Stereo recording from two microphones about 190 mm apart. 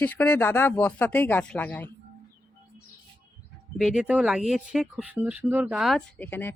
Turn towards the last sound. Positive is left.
turn(degrees=10)  # may be behind; listen again after turning